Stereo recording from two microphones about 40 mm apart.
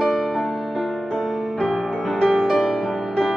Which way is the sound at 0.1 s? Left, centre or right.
Centre.